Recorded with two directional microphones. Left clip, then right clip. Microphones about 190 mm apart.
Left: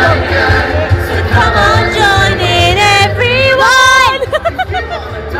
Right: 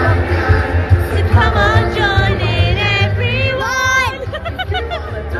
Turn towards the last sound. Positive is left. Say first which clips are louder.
# left 9 dB
turn(degrees=10)  # may be behind; listen again after turning